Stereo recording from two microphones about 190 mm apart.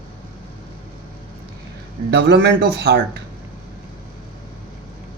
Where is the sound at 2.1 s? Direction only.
65° right (ahead or behind).